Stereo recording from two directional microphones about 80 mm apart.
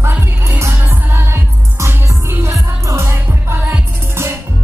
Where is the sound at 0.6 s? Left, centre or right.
Right.